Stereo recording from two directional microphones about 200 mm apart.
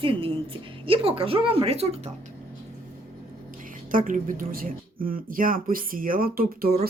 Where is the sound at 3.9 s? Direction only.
45° right (ahead or behind).